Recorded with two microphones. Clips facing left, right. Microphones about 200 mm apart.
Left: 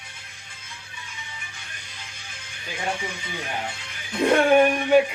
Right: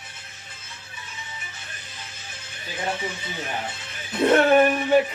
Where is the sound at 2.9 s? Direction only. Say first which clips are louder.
Even; 10° left (ahead or behind).